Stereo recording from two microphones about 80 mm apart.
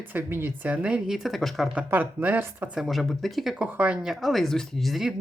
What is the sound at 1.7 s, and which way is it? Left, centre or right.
Speech, right.